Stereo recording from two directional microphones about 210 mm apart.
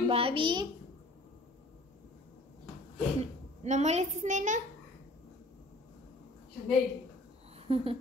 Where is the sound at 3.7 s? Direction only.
30° right (ahead or behind).